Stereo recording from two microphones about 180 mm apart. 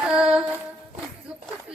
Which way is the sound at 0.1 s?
5° right (ahead or behind).